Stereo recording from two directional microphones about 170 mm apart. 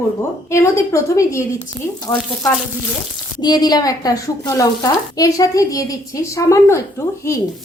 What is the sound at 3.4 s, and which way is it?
Speech, 25° left (ahead or behind).